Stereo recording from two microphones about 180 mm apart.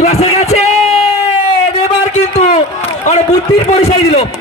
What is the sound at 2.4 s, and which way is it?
A man's voice, 40° left (ahead or behind).